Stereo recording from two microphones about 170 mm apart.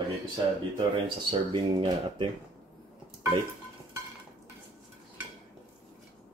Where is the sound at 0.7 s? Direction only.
30° right (ahead or behind).